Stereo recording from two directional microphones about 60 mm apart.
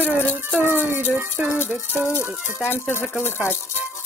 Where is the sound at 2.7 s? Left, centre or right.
Left.